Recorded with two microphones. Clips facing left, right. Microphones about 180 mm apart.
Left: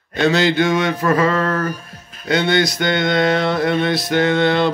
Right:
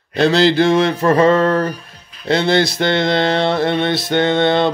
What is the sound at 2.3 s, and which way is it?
Mantra, 30° right (ahead or behind).